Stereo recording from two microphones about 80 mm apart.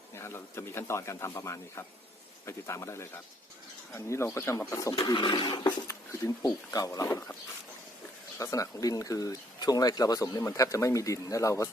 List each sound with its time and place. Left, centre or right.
0.2 s speech: left
5.1 s a sound: left
6.7 s speech: left
8.4 s speech: left